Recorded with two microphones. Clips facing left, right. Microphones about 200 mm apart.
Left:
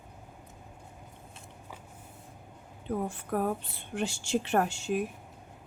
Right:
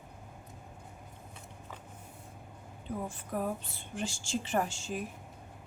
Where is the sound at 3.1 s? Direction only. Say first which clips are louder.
Left 2 dB; 60° left (ahead or behind).